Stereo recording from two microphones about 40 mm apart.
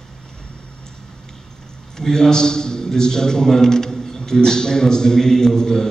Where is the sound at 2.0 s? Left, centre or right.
Centre.